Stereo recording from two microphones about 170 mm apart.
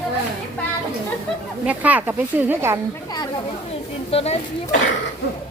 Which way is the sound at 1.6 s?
10° right (ahead or behind).